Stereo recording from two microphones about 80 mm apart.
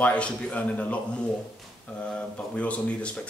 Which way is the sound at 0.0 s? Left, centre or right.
Centre.